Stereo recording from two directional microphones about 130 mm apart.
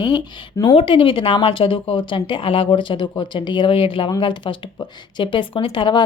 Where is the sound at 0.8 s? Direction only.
40° left (ahead or behind).